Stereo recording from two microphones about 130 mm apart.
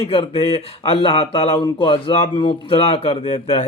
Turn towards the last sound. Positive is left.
turn(degrees=50)  # may be behind; listen again after turning